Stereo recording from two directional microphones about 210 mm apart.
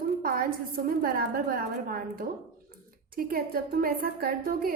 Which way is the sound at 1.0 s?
45° right (ahead or behind).